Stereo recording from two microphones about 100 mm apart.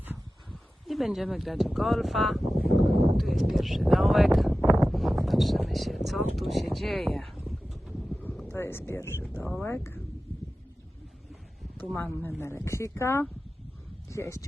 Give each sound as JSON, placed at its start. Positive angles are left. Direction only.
{"t": 0.9, "sound": "speech", "side_deg": 0}
{"t": 6.7, "sound": "a sound", "side_deg": 0}
{"t": 8.1, "sound": "wind", "side_deg": 15}
{"t": 8.5, "sound": "speech", "side_deg": 25}
{"t": 12.4, "sound": "speech", "side_deg": 25}